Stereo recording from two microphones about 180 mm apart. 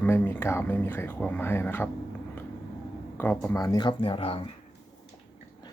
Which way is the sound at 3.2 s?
10° left (ahead or behind).